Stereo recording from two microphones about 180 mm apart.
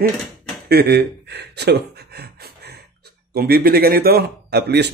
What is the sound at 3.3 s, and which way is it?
Speech, 60° right (ahead or behind).